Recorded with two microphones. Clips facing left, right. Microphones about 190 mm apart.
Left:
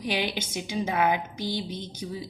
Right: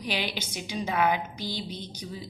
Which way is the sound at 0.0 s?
20° left (ahead or behind).